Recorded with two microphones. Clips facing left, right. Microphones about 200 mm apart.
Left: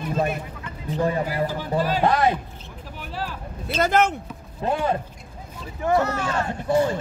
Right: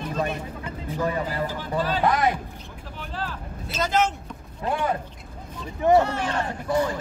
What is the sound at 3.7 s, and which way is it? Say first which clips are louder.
Speech: left 3 dB; 60° left (ahead or behind).